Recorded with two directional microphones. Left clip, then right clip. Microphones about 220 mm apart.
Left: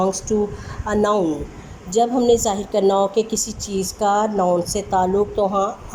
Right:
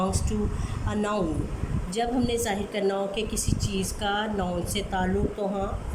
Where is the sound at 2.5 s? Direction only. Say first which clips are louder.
Left 9 dB; 15° left (ahead or behind).